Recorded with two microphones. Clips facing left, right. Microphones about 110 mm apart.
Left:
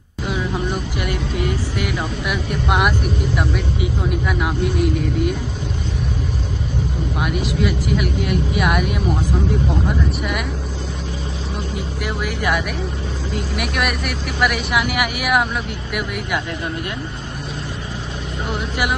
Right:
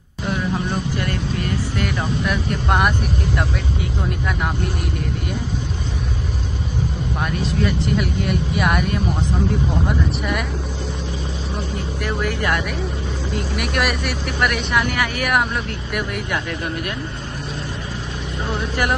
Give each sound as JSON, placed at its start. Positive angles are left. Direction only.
{"t": 0.9, "sound": "speech", "side_deg": 15}
{"t": 4.4, "sound": "speech", "side_deg": 0}
{"t": 7.6, "sound": "speech", "side_deg": 5}
{"t": 12.0, "sound": "speech", "side_deg": 15}